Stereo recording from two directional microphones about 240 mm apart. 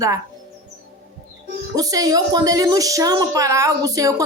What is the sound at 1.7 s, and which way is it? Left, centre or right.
A woman's voice, centre.